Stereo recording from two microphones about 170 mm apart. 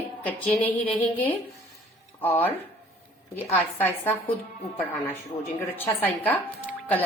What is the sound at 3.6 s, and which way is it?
A woman's voice, 10° left (ahead or behind).